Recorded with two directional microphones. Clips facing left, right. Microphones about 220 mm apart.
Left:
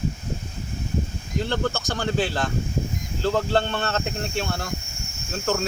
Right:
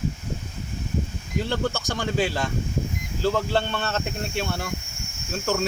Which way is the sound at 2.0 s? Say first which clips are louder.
Even; 10° right (ahead or behind).